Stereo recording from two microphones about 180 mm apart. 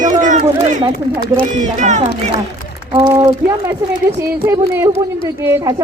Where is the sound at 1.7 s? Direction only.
40° right (ahead or behind).